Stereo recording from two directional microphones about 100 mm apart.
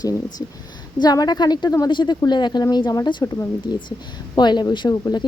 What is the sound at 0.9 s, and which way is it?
A woman's voice, 40° left (ahead or behind).